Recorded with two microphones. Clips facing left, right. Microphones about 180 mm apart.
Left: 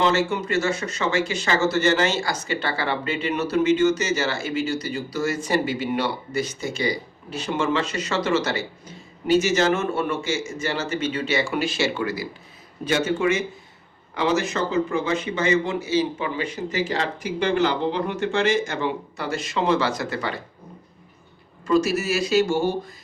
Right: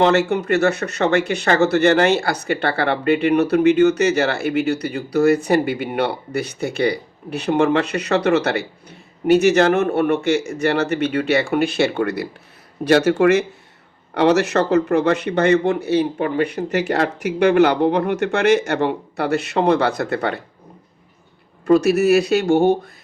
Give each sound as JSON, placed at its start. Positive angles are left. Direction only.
{"t": 0.0, "sound": "speech", "side_deg": -60}
{"t": 21.7, "sound": "speech", "side_deg": -60}